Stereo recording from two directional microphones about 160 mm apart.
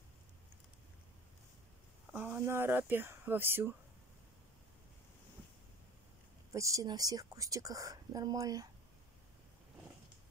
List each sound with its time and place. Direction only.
2.1 s speech: 15° right (ahead or behind)
6.5 s speech: 20° right (ahead or behind)